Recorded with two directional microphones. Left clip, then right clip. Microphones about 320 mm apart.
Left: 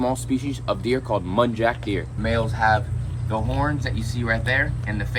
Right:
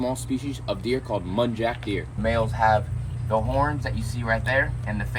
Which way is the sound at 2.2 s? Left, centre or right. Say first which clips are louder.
Even; centre.